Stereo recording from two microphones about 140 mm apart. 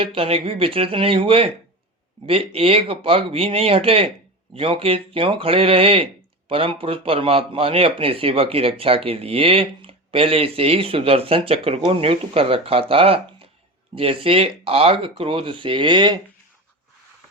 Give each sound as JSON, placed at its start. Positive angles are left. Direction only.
{"t": 0.0, "sound": "a man's voice", "side_deg": -40}